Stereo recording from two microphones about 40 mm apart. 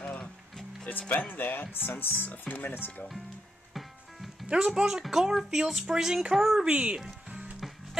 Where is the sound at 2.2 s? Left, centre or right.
Left.